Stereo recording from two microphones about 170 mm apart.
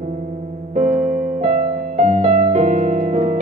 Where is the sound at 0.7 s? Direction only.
45° right (ahead or behind).